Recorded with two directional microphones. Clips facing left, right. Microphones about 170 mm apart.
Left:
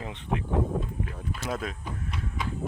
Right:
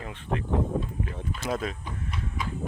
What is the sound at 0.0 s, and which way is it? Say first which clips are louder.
Speech: left 1 dB; 20° left (ahead or behind).